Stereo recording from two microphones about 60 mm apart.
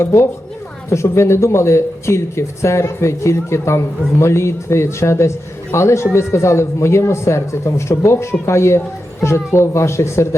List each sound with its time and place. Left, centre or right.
0.0 s speech: left